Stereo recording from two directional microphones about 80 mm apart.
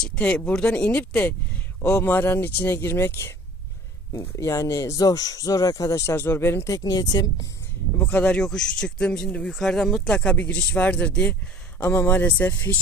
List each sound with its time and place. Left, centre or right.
0.0 s speech: centre; by 3.3 s left
4.1 s speech: left
6.1 s speech: left
6.7 s speech: left
7.9 s speech: centre
11.8 s speech: left